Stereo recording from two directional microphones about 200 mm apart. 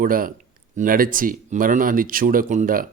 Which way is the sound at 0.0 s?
45° right (ahead or behind).